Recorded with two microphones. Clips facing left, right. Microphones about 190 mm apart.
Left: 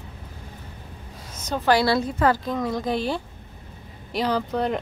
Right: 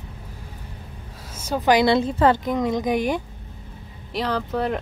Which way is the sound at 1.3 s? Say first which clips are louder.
Right 2 dB; 10° right (ahead or behind).